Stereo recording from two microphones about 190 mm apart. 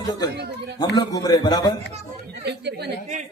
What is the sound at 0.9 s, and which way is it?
Speech, 20° left (ahead or behind).